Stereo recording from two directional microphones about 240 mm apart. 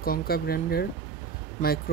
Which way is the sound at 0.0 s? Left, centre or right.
Left.